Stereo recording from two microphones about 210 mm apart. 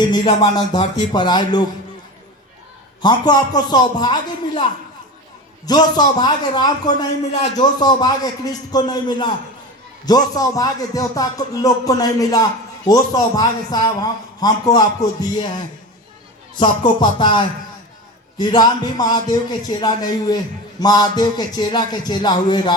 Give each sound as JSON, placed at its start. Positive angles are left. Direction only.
{"t": 0.4, "sound": "a man's voice", "side_deg": 20}
{"t": 3.0, "sound": "a man's voice", "side_deg": 20}